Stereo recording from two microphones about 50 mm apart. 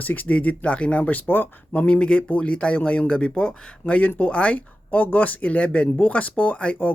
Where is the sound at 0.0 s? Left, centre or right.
Left.